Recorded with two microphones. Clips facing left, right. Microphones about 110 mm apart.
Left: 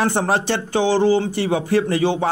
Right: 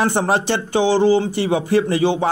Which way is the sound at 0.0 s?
20° right (ahead or behind).